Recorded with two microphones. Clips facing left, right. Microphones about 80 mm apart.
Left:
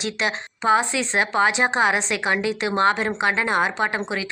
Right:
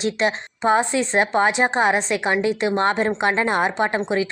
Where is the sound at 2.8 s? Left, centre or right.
Right.